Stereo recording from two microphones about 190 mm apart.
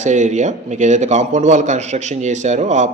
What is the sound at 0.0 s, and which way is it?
A man's voice, 40° right (ahead or behind).